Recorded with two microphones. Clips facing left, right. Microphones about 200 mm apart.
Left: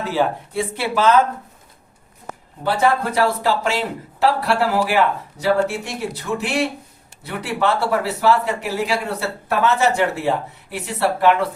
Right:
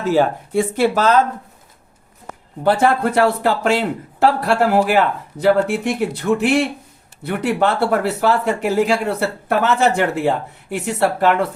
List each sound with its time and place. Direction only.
0.0 s speech: 45° right (ahead or behind)
2.6 s speech: 50° right (ahead or behind)